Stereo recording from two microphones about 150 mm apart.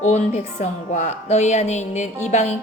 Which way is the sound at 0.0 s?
50° left (ahead or behind).